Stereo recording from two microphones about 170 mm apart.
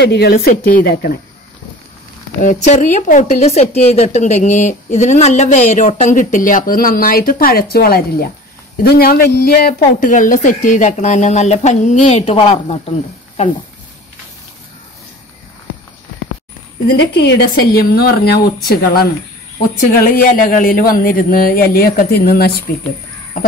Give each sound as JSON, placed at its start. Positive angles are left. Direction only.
{"t": 0.0, "sound": "speech", "side_deg": 70}
{"t": 2.4, "sound": "speech", "side_deg": 45}
{"t": 16.8, "sound": "speech", "side_deg": 85}